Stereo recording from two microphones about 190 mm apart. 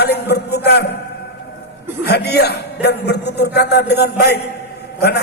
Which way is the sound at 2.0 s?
60° left (ahead or behind).